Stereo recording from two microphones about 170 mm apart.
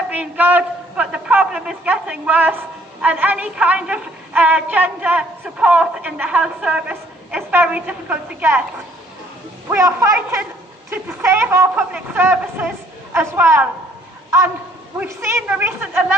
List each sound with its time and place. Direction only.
0.1 s a woman's voice: 10° right (ahead or behind)
9.6 s a woman's voice: 15° right (ahead or behind)